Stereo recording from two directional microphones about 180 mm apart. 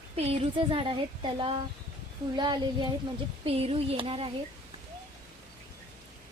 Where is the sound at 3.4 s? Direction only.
35° right (ahead or behind).